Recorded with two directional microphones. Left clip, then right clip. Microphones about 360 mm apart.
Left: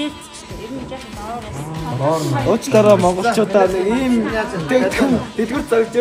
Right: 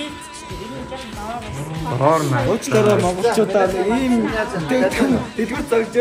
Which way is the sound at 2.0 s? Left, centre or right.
Centre.